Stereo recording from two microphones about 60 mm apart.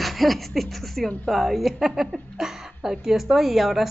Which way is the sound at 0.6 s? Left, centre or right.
Centre.